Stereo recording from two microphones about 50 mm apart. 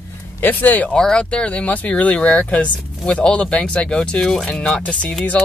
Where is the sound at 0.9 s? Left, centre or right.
Centre.